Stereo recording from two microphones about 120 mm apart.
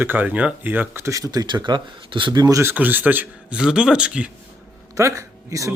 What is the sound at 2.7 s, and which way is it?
Speech, 15° right (ahead or behind).